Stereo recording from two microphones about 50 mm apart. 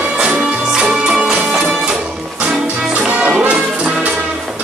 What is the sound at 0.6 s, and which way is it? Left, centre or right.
Music, centre.